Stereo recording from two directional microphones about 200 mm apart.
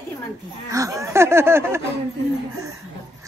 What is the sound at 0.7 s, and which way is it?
A woman's voice, 15° right (ahead or behind).